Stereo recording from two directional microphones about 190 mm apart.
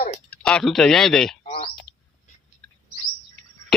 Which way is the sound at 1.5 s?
35° left (ahead or behind).